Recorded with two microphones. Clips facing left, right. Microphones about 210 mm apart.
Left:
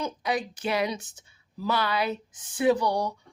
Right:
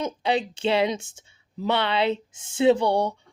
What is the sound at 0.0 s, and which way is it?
Speech, 25° right (ahead or behind).